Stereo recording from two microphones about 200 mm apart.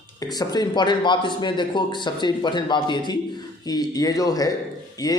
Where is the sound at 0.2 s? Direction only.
20° left (ahead or behind).